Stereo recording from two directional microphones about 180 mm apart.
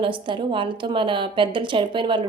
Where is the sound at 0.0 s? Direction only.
30° right (ahead or behind).